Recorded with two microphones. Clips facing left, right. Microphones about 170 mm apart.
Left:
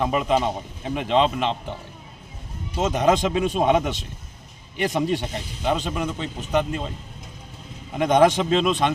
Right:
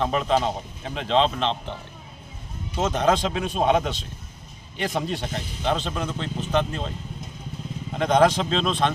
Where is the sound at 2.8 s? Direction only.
15° left (ahead or behind).